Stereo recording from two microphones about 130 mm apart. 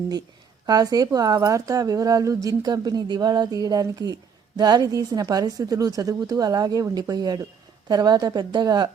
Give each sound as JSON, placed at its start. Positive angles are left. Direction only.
{"t": 0.7, "sound": "a woman's voice", "side_deg": -30}